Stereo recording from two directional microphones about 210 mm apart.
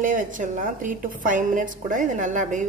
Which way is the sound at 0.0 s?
40° right (ahead or behind).